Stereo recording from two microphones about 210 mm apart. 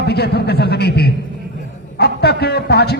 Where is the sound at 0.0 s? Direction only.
50° left (ahead or behind).